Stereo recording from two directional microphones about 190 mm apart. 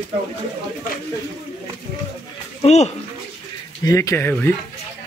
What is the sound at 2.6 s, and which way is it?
Speech, 35° left (ahead or behind).